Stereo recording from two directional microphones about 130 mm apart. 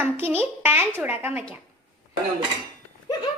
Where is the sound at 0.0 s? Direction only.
15° right (ahead or behind).